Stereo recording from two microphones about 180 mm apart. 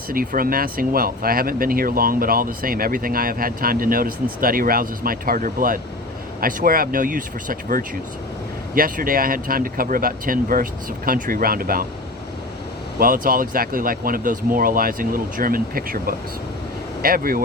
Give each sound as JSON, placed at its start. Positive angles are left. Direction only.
{"t": 0.1, "sound": "speech", "side_deg": -55}
{"t": 13.0, "sound": "speech", "side_deg": -50}